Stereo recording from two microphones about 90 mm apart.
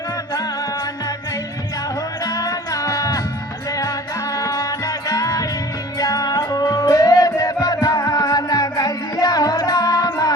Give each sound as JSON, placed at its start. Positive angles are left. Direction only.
{"t": 2.2, "sound": "music", "side_deg": 40}